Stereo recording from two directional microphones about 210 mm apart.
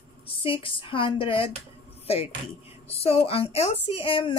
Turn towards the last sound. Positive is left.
turn(degrees=25)  # may be behind; listen again after turning